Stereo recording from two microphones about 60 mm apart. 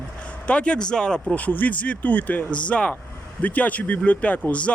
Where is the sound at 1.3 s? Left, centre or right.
Left.